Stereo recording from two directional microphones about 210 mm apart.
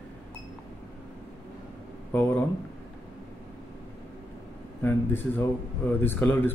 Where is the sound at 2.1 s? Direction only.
10° left (ahead or behind).